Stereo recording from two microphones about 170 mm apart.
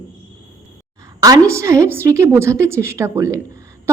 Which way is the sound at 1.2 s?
20° right (ahead or behind).